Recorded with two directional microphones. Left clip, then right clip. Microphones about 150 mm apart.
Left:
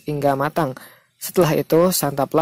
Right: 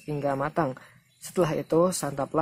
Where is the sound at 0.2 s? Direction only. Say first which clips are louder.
Left 8 dB; 45° left (ahead or behind).